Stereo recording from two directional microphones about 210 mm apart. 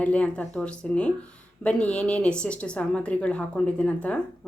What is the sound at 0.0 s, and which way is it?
A woman's voice, 5° left (ahead or behind).